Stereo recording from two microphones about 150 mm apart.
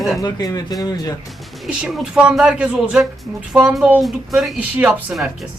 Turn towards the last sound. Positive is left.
turn(degrees=0)  # may be behind; listen again after turning